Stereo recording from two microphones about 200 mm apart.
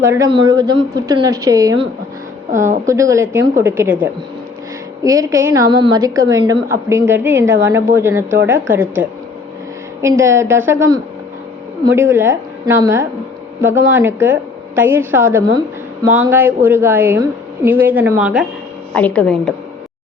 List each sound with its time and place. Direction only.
0.0 s a woman's voice: 15° right (ahead or behind)
2.5 s a woman's voice: 40° right (ahead or behind)
2.8 s a woman's voice: 15° right (ahead or behind)
18.9 s a woman's voice: 5° left (ahead or behind)